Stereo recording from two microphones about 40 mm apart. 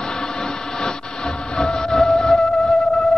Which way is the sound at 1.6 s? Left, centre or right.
Centre.